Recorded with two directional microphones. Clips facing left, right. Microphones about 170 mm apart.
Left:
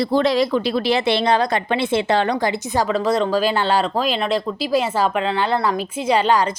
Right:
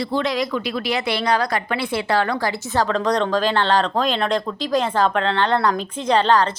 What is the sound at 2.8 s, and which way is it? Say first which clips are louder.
A woman's voice: left 2 dB; 5° left (ahead or behind).